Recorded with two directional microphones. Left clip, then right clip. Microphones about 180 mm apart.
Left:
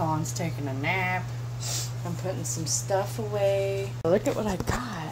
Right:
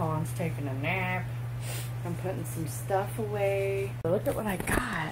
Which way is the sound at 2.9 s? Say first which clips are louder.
Left 1 dB; 5° left (ahead or behind).